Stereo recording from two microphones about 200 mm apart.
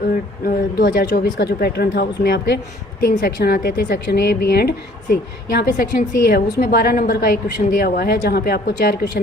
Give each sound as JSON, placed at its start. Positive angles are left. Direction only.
{"t": 0.1, "sound": "a woman's voice", "side_deg": 45}